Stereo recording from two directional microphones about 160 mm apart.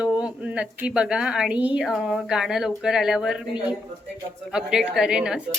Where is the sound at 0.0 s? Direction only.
5° right (ahead or behind).